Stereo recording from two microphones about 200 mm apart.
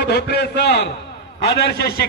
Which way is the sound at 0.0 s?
55° left (ahead or behind).